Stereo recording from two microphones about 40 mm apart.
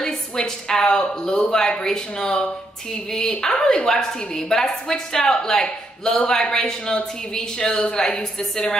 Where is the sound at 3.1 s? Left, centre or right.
Centre.